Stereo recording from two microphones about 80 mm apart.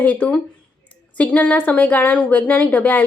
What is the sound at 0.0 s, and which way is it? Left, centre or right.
A woman's voice, centre.